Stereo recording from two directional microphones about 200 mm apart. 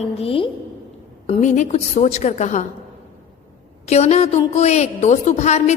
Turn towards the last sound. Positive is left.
turn(degrees=35)  # may be behind; listen again after turning